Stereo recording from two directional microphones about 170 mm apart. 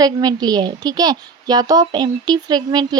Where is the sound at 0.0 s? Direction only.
25° right (ahead or behind).